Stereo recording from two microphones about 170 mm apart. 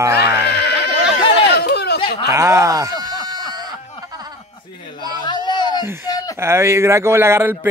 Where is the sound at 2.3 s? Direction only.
15° right (ahead or behind).